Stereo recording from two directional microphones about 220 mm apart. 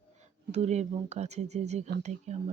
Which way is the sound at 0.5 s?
30° right (ahead or behind).